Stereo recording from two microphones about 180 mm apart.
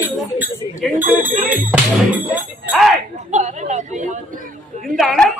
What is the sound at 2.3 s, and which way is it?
Music, centre (ahead or behind).